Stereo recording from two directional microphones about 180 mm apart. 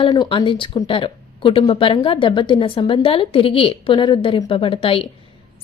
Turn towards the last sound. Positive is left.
turn(degrees=30)  # may be behind; listen again after turning